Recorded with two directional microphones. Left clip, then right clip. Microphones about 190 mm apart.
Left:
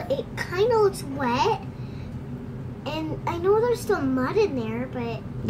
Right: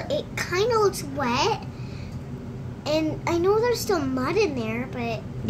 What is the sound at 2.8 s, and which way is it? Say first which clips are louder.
A child's voice: right 5 dB; 30° right (ahead or behind).